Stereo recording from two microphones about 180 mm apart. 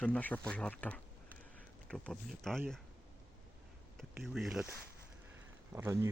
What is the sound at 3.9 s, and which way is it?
Speech, centre (ahead or behind).